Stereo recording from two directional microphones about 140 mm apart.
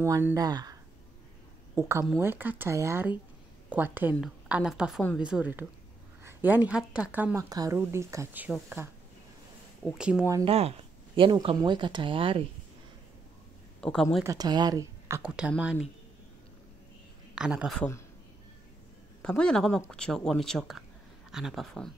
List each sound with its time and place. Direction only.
0.0 s speech: 20° right (ahead or behind)
1.8 s a woman's voice: 20° right (ahead or behind)
7.4 s speech: 25° right (ahead or behind); by 8.8 s 10° right (ahead or behind)
9.9 s speech: 5° right (ahead or behind)
10.4 s speech: 45° right (ahead or behind)
13.7 s speech: 5° left (ahead or behind)
14.2 s speech: 25° right (ahead or behind)
15.3 s speech: 5° right (ahead or behind)
17.4 s speech: 5° right (ahead or behind)
19.2 s speech: 5° left (ahead or behind)